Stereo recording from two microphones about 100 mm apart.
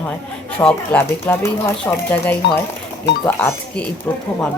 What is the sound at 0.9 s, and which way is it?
Speech, 20° left (ahead or behind).